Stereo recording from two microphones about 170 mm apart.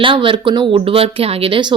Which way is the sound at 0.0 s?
30° right (ahead or behind).